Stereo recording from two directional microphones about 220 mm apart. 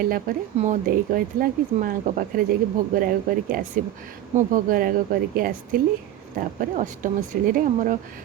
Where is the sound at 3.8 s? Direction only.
35° right (ahead or behind).